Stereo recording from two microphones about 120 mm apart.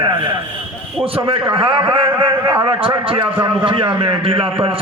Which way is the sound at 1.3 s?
50° right (ahead or behind).